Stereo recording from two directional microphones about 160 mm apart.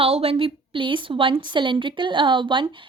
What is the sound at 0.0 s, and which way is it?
A woman's voice, 40° right (ahead or behind).